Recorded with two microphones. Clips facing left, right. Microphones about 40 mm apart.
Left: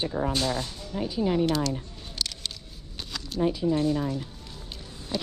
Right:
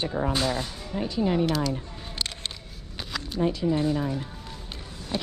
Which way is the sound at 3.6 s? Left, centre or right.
Centre.